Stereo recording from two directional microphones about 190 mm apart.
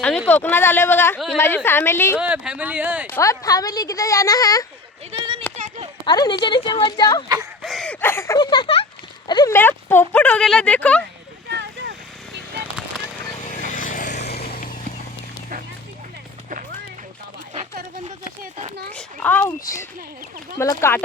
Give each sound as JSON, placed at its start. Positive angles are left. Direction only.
{"t": 0.3, "sound": "speech", "side_deg": 10}
{"t": 2.1, "sound": "speech", "side_deg": -5}
{"t": 3.1, "sound": "a woman's voice", "side_deg": 15}
{"t": 5.5, "sound": "a sound", "side_deg": -40}
{"t": 6.1, "sound": "a woman's voice", "side_deg": 20}
{"t": 7.6, "sound": "a sound", "side_deg": 0}
{"t": 8.0, "sound": "a sound", "side_deg": 15}
{"t": 9.6, "sound": "speech", "side_deg": 10}
{"t": 11.4, "sound": "a sound", "side_deg": -60}
{"t": 13.4, "sound": "vehicle", "side_deg": 45}
{"t": 14.2, "sound": "vehicle", "side_deg": 55}
{"t": 18.9, "sound": "speech", "side_deg": 10}